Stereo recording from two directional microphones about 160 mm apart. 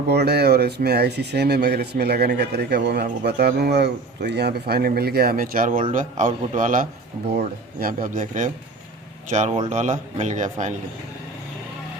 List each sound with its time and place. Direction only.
0.1 s speech: 90° right; by 6.8 s 50° right (ahead or behind)
7.3 s a man's voice: 70° right (ahead or behind); by 10.8 s 50° right (ahead or behind)